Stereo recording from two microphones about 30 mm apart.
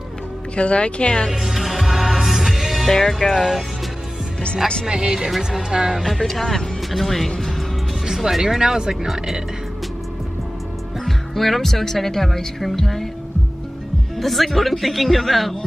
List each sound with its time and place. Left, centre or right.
0.6 s speech: left
1.3 s music: centre
2.9 s a woman's voice: centre
3.3 s speech: centre
4.8 s speech: right
6.1 s a woman's voice: centre
8.1 s speech: centre
11.1 s music: centre
11.8 s a woman's voice: centre
14.1 s speech: centre